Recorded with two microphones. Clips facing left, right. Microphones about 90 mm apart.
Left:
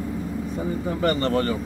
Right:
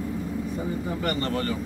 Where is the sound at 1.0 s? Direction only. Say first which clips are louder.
Left 7 dB; 30° left (ahead or behind).